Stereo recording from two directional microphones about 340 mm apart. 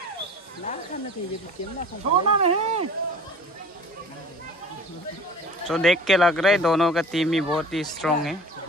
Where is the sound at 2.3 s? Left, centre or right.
Centre.